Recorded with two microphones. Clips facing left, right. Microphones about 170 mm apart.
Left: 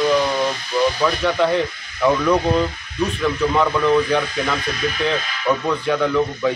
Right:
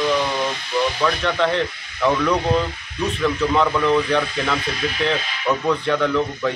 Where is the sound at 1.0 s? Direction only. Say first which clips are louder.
Left 2 dB; 5° left (ahead or behind).